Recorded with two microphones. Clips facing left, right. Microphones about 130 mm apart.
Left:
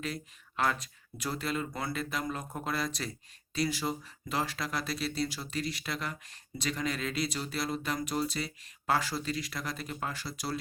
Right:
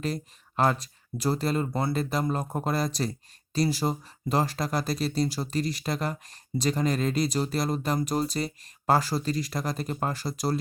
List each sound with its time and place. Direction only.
0.0 s speech: 40° right (ahead or behind)